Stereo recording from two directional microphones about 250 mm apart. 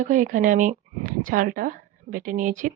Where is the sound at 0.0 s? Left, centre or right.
Right.